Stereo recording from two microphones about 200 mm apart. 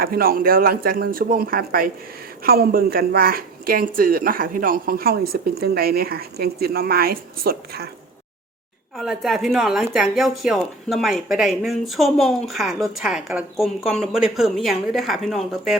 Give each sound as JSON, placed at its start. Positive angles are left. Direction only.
{"t": 0.0, "sound": "speech", "side_deg": -50}
{"t": 9.0, "sound": "speech", "side_deg": 0}